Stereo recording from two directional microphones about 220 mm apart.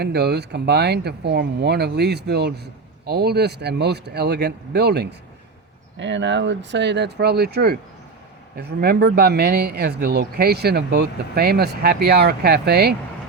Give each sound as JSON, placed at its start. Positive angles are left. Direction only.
{"t": 0.0, "sound": "speech", "side_deg": -50}